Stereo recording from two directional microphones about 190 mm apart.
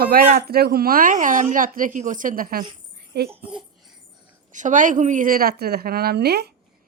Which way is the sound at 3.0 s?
55° right (ahead or behind).